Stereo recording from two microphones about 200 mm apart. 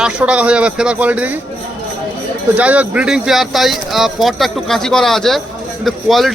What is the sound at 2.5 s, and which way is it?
Speech, 5° right (ahead or behind).